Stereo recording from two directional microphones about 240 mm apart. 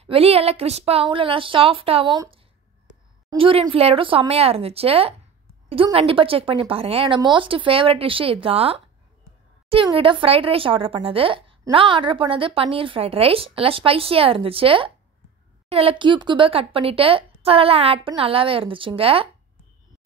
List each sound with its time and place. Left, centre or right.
0.0 s speech: right